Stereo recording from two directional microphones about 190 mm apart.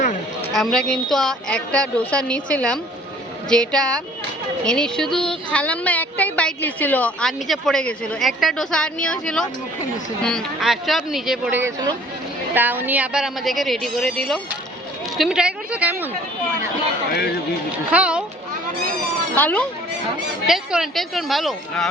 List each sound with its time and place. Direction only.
0.5 s a woman's voice: 5° left (ahead or behind)
11.6 s speech: 20° right (ahead or behind)
12.5 s a woman's voice: 10° right (ahead or behind)
17.1 s speech: 55° left (ahead or behind)
17.9 s a woman's voice: 5° right (ahead or behind)
19.4 s speech: 10° left (ahead or behind)
20.5 s a woman's voice: 5° right (ahead or behind)